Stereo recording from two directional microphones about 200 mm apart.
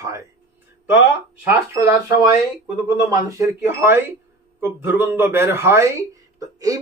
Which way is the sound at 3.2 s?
10° right (ahead or behind).